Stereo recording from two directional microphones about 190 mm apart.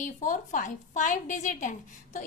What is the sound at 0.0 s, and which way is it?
A woman's voice, 40° left (ahead or behind).